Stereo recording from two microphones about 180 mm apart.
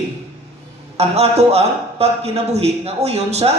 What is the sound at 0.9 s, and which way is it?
A man's voice, 35° right (ahead or behind).